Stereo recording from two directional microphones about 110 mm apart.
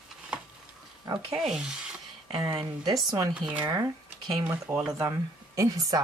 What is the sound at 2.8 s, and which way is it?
Speech, 40° right (ahead or behind).